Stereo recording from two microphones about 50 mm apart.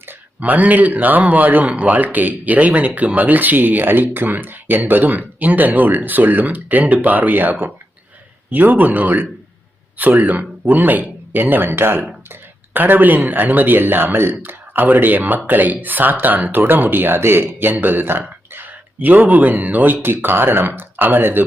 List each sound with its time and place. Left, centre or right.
0.0 s a man's voice: right
14.7 s speech: right